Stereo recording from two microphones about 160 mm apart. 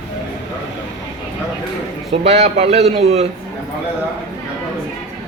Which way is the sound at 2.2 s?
40° right (ahead or behind).